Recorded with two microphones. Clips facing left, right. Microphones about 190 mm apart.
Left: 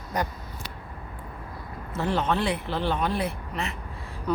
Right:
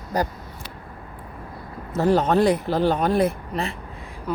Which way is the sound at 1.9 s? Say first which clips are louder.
Right 7 dB; 40° right (ahead or behind).